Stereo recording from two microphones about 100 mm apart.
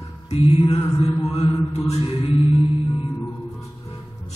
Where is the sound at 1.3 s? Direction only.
90° left.